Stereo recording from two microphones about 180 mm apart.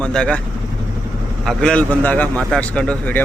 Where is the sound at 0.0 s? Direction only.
5° left (ahead or behind).